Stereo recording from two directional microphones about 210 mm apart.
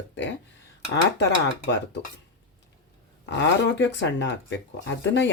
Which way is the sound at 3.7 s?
55° left (ahead or behind).